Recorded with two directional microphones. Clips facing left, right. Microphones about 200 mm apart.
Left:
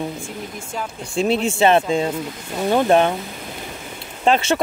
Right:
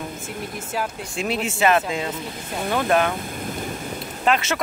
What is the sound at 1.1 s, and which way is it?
A man's voice, 30° left (ahead or behind).